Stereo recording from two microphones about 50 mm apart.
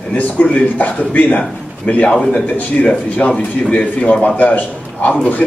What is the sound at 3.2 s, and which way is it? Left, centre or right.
Speech, left.